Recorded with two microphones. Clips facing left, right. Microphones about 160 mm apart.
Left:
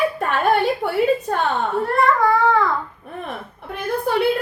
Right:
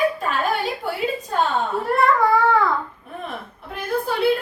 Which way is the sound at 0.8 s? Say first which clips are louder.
Left 3 dB; 50° left (ahead or behind).